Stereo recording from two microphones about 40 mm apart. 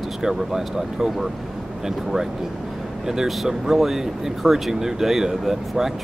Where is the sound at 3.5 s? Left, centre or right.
Centre.